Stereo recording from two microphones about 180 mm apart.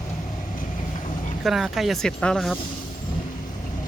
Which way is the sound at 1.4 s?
Centre (ahead or behind).